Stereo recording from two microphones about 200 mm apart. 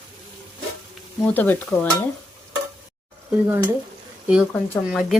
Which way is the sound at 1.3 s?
10° left (ahead or behind).